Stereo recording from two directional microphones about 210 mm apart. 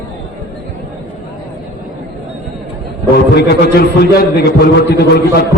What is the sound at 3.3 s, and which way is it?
A man's voice, 50° left (ahead or behind).